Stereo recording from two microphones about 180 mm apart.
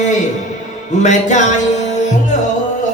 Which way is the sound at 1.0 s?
40° left (ahead or behind).